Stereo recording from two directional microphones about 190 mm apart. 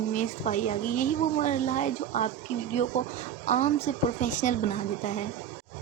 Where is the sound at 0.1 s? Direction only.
40° left (ahead or behind).